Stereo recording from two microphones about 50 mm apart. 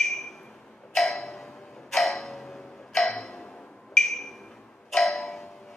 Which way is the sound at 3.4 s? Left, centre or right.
Centre.